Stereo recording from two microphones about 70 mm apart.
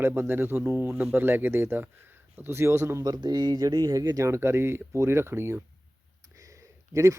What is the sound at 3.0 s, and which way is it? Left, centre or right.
Speech, right.